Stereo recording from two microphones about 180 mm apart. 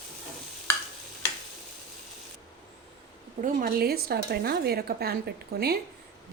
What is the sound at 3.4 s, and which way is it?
A woman's voice, 45° right (ahead or behind).